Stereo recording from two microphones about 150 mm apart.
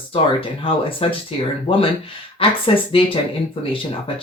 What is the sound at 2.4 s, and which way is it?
Speech, 35° left (ahead or behind).